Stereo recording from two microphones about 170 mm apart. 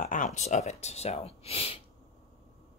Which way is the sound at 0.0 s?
50° left (ahead or behind).